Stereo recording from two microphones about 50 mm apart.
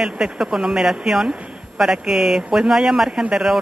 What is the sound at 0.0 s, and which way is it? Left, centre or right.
Speech, centre.